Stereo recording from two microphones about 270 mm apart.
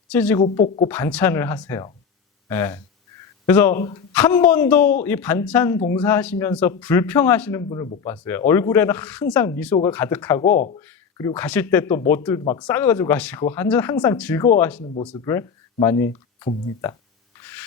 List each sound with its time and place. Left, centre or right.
0.1 s speech: centre
0.3 s speech: centre
0.9 s speech: centre
10.4 s speech: left
10.8 s speech: centre